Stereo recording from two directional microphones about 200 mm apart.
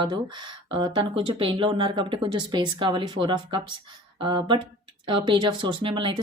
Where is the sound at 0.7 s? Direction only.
25° right (ahead or behind).